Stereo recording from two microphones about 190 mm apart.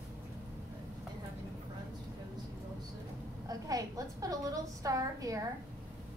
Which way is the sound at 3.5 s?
20° right (ahead or behind).